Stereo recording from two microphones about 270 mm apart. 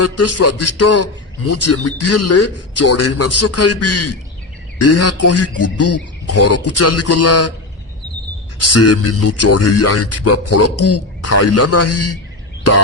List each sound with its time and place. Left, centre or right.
0.0 s speech: left
8.7 s speech: left